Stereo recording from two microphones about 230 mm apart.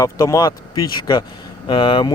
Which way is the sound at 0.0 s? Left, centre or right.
Centre.